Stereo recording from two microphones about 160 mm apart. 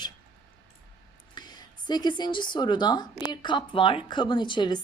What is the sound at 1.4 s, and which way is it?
A woman's voice, 25° left (ahead or behind).